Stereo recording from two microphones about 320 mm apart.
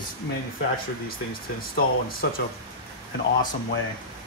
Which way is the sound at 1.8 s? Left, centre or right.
Left.